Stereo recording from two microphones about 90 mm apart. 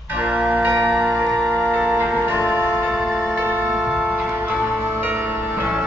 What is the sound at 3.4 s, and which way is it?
Music, 20° right (ahead or behind).